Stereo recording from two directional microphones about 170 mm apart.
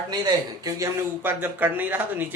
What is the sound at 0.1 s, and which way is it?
A man's voice, 20° right (ahead or behind).